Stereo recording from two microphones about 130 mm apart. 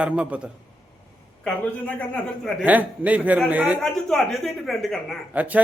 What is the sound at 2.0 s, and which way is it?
Speech, centre (ahead or behind).